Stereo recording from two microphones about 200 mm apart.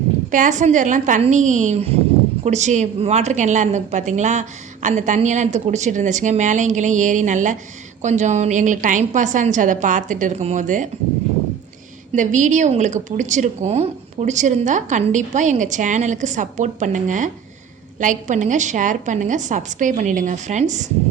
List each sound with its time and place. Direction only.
0.3 s a woman's voice: 40° right (ahead or behind)
12.1 s a woman's voice: 40° right (ahead or behind)